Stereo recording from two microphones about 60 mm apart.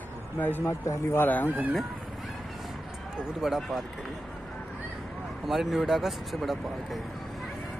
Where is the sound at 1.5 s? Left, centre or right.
Right.